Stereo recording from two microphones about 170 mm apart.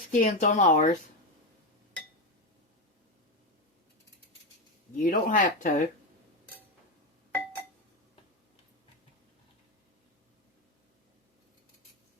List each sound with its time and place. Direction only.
0.1 s speech: 45° left (ahead or behind)
5.0 s speech: 50° left (ahead or behind)